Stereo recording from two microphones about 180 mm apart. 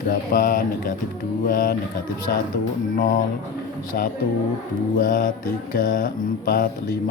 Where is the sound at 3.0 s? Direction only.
45° left (ahead or behind).